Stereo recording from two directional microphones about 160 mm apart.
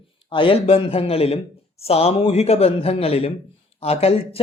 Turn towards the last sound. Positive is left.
turn(degrees=35)  # may be behind; listen again after turning